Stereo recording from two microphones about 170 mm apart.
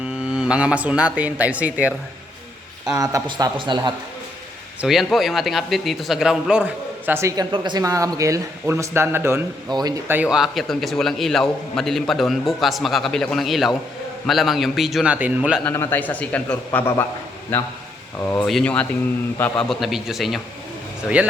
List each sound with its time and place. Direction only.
0.3 s speech: 5° right (ahead or behind)
3.0 s speech: 20° right (ahead or behind)
4.8 s a man's voice: centre (ahead or behind); by 10.2 s 20° right (ahead or behind)
10.2 s a man's voice: 5° right (ahead or behind)
15.6 s a man's voice: 15° left (ahead or behind)